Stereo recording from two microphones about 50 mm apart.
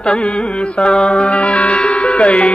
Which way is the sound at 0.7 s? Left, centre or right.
Centre.